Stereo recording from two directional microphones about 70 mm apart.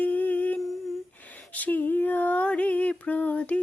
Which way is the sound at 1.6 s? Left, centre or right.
Left.